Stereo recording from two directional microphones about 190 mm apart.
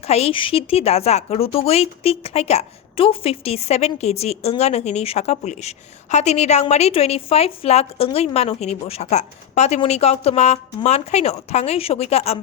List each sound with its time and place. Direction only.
0.0 s speech: 35° left (ahead or behind)